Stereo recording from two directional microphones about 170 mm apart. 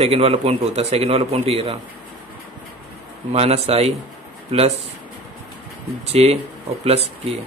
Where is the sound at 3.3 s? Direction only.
35° right (ahead or behind).